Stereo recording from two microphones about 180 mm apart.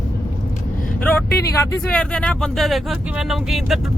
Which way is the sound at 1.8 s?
5° left (ahead or behind).